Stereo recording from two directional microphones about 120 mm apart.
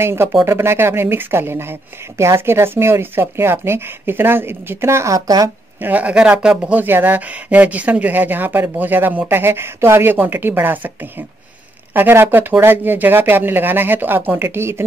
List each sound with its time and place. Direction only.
0.0 s speech: 20° right (ahead or behind)
5.8 s speech: 15° right (ahead or behind)